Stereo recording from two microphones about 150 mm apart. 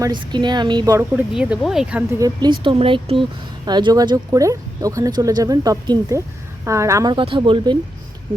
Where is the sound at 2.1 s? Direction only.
25° right (ahead or behind).